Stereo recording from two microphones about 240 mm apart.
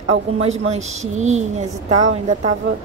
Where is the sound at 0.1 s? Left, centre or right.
Right.